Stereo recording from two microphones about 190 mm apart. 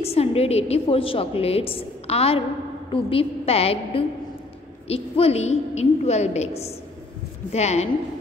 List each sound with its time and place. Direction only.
0.0 s a woman's voice: 30° left (ahead or behind)